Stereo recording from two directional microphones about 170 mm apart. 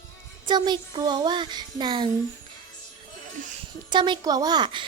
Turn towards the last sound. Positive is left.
turn(degrees=-30)  # may be behind; listen again after turning